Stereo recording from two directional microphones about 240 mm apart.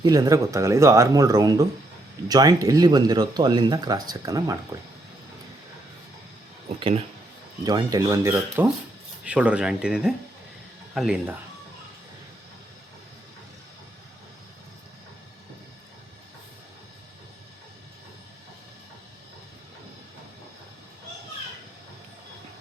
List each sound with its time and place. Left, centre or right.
0.0 s speech: centre
6.7 s speech: right; by 11.3 s centre